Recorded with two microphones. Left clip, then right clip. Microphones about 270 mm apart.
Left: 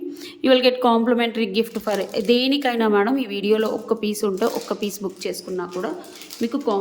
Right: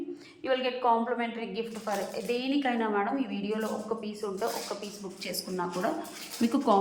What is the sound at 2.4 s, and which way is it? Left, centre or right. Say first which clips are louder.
Speech: left 9 dB; left.